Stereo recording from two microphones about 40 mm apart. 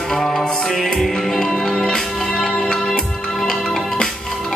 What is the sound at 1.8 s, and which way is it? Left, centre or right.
Music, centre.